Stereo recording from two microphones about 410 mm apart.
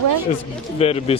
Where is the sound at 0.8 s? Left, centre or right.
Centre.